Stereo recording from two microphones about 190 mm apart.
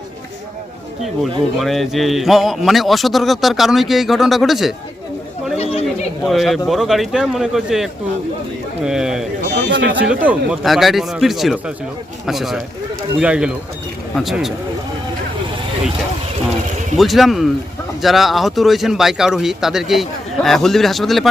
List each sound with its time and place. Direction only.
1.2 s a man's voice: centre (ahead or behind)
5.5 s chatter: 35° left (ahead or behind)
6.2 s a man's voice: centre (ahead or behind)
9.6 s speech: 70° right (ahead or behind)
9.9 s a man's voice: 10° right (ahead or behind)
17.0 s a man's voice: centre (ahead or behind)